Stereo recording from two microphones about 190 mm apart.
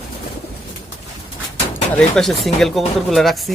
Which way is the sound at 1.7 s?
5° left (ahead or behind).